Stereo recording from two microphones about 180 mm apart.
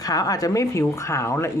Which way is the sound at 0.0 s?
20° left (ahead or behind).